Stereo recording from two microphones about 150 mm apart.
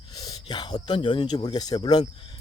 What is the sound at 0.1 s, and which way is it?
Speech, 25° left (ahead or behind).